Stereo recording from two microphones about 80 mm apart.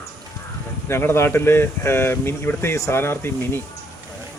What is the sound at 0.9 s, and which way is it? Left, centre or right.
A man's voice, left.